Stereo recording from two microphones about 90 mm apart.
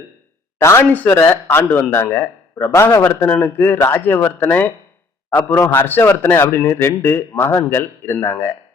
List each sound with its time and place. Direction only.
0.6 s a man's voice: 30° left (ahead or behind)